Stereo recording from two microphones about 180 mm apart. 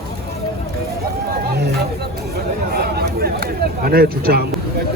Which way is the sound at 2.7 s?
60° right (ahead or behind).